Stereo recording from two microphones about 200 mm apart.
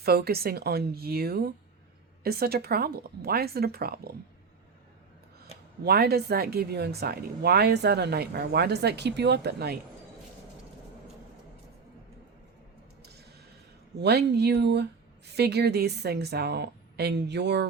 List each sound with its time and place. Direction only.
0.0 s speech: 50° right (ahead or behind)
5.8 s speech: 50° right (ahead or behind)
14.0 s speech: 55° right (ahead or behind)